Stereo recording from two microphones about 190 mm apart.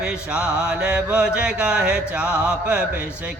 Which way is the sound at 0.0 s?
5° right (ahead or behind).